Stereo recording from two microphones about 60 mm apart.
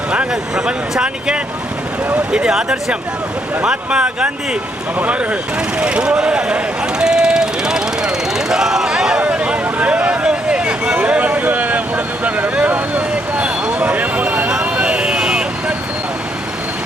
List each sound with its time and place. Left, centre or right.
0.1 s speech: centre
7.0 s jackhammer: centre
10.9 s vehicle: right